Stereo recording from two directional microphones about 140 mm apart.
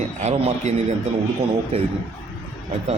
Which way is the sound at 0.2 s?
55° right (ahead or behind).